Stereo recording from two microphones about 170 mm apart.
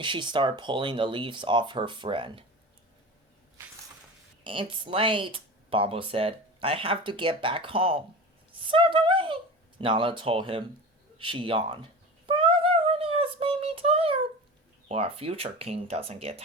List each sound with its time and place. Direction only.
0.0 s speech: 30° right (ahead or behind)
4.4 s speech: 30° right (ahead or behind)
11.2 s a sound: 30° right (ahead or behind)
14.8 s speech: 35° right (ahead or behind)